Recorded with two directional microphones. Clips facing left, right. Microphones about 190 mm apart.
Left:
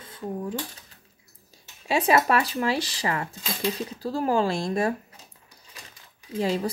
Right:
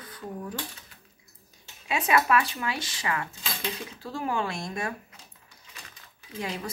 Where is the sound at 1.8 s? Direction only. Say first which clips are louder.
Left 4 dB; 30° left (ahead or behind).